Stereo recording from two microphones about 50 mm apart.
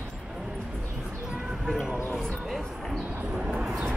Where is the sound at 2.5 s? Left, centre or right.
Centre.